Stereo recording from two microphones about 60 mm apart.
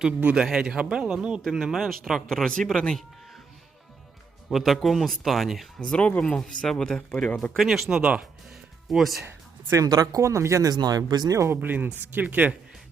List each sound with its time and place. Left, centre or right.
0.3 s speech: centre
1.5 s speech: centre
2.3 s speech: centre
4.4 s speech: centre
5.8 s speech: centre
6.3 s speech: centre
7.5 s speech: centre
9.7 s speech: right
10.6 s speech: right
11.4 s speech: right